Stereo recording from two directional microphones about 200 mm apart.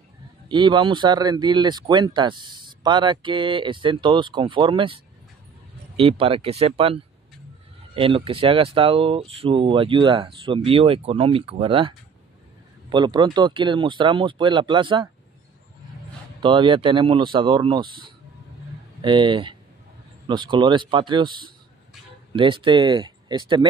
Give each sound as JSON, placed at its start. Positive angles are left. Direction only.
{"t": 0.5, "sound": "speech", "side_deg": -25}
{"t": 12.9, "sound": "speech", "side_deg": -20}
{"t": 16.3, "sound": "speech", "side_deg": -25}
{"t": 18.9, "sound": "speech", "side_deg": -25}